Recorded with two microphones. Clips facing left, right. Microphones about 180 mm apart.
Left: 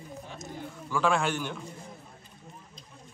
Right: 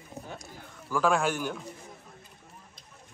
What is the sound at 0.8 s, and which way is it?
Speech, 5° right (ahead or behind).